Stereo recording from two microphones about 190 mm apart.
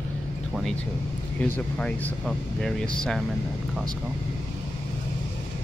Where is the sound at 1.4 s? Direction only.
5° left (ahead or behind).